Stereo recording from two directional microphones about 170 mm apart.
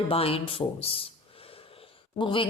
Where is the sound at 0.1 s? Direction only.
35° left (ahead or behind).